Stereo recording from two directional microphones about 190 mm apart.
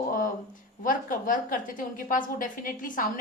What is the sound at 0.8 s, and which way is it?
A woman's voice, 45° left (ahead or behind).